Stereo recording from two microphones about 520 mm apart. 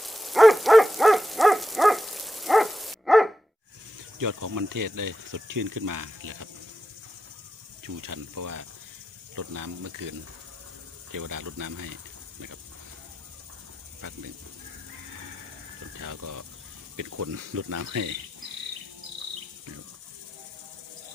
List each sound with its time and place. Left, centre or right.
0.0 s owl: centre
4.2 s speech: right
7.9 s speech: right
16.0 s speech: right